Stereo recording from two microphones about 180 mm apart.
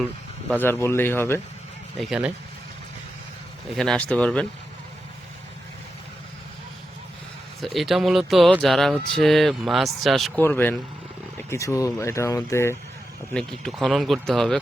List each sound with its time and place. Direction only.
0.6 s speech: 15° left (ahead or behind)
2.0 s speech: 5° right (ahead or behind)
3.8 s speech: 5° left (ahead or behind)
7.6 s speech: centre (ahead or behind); by 12.7 s 15° left (ahead or behind)
13.3 s speech: 5° left (ahead or behind)